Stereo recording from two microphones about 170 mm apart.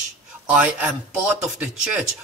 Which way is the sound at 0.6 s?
5° right (ahead or behind).